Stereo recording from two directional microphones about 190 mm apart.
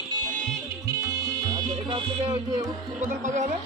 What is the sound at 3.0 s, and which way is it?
Speech, 40° right (ahead or behind).